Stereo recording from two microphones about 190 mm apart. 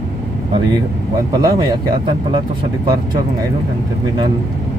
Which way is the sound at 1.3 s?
20° right (ahead or behind).